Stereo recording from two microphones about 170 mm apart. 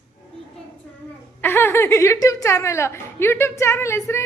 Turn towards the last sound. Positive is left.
turn(degrees=15)  # may be behind; listen again after turning